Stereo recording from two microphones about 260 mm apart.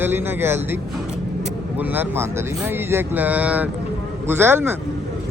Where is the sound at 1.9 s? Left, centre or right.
Centre.